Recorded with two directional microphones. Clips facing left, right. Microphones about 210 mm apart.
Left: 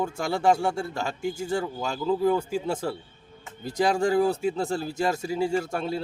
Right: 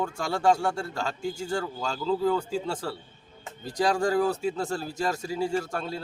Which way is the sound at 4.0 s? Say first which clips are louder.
Left 2 dB; 25° left (ahead or behind).